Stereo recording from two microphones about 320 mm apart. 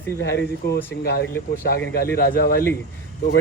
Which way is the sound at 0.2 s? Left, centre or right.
Left.